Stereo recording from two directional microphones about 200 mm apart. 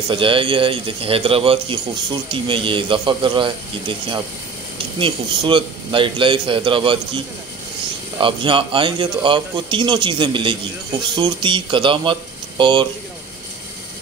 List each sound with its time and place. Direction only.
0.1 s speech: 25° right (ahead or behind)
8.2 s speech: 25° right (ahead or behind)